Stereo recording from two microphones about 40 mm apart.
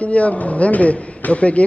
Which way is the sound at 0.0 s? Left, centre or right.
Left.